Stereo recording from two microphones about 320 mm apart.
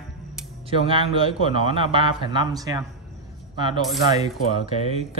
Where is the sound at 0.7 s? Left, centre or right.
Centre.